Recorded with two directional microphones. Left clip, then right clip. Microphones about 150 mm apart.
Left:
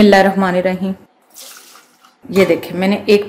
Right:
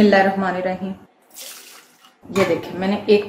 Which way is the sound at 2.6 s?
55° left (ahead or behind).